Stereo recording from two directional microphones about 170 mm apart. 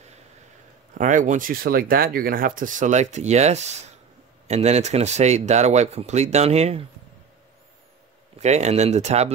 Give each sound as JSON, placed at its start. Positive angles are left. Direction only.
{"t": 0.9, "sound": "speech", "side_deg": -50}
{"t": 8.4, "sound": "speech", "side_deg": -40}